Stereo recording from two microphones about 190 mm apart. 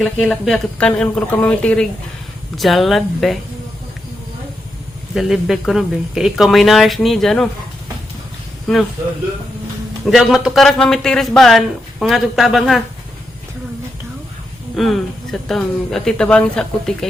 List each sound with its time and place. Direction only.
0.0 s a man's voice: centre (ahead or behind)
5.1 s a man's voice: centre (ahead or behind)
8.6 s speech: centre (ahead or behind)
10.1 s a man's voice: centre (ahead or behind)
14.8 s a man's voice: centre (ahead or behind)